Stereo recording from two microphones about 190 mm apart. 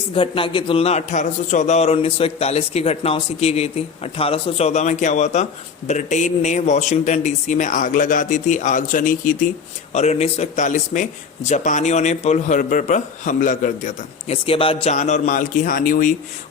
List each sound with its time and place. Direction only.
0.1 s speech: 25° left (ahead or behind); by 16.1 s 45° left (ahead or behind)